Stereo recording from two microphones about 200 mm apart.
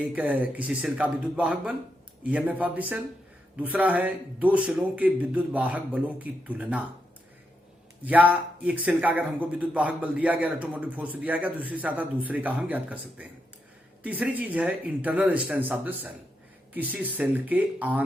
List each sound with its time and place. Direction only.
0.0 s a man's voice: 10° right (ahead or behind)
8.0 s a man's voice: 10° right (ahead or behind)